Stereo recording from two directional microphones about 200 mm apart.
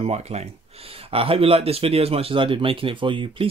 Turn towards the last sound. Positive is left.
turn(degrees=-25)  # may be behind; listen again after turning